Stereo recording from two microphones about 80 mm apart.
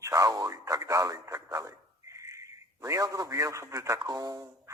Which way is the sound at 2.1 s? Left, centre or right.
Right.